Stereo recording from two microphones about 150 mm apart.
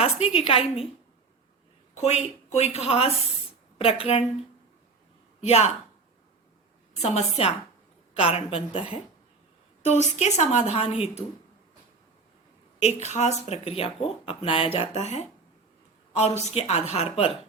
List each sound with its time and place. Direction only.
0.0 s a woman's voice: 40° left (ahead or behind)
2.0 s a woman's voice: 50° left (ahead or behind)
5.4 s a woman's voice: 45° left (ahead or behind)
7.0 s a woman's voice: 45° left (ahead or behind)
10.2 s speech: 50° left (ahead or behind)
12.8 s speech: 50° left (ahead or behind)